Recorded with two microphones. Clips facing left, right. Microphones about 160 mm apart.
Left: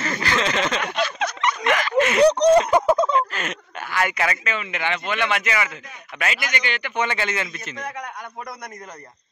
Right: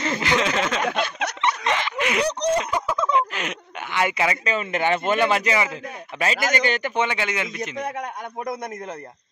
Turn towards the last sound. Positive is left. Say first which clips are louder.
# right 4 dB
turn(degrees=-25)  # may be behind; listen again after turning